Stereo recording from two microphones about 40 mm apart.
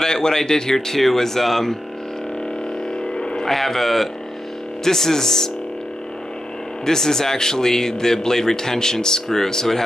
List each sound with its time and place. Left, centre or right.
0.0 s speech: centre
3.0 s a sound: centre
3.5 s speech: centre
6.9 s speech: centre